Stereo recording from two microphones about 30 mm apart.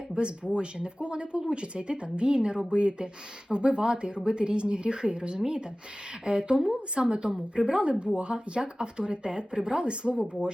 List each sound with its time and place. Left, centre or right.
0.1 s speech: right